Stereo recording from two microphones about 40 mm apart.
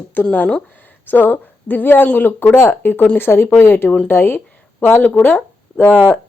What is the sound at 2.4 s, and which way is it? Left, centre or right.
Speech, left.